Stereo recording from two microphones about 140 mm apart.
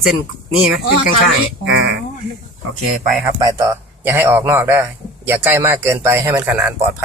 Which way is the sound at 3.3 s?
25° right (ahead or behind).